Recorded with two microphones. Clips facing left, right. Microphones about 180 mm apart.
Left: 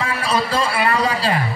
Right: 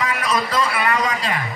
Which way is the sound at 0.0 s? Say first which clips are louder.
Left 1 dB; 30° left (ahead or behind).